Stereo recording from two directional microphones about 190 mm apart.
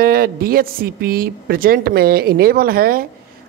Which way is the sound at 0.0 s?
50° right (ahead or behind).